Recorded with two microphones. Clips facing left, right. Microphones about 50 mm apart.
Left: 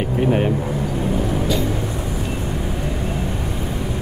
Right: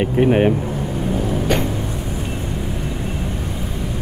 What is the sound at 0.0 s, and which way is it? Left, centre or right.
Speech, right.